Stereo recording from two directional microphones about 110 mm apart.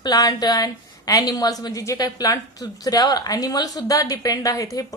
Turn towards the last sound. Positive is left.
turn(degrees=30)  # may be behind; listen again after turning